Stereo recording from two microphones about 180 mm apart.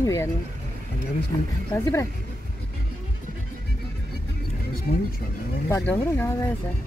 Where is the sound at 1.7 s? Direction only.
15° left (ahead or behind).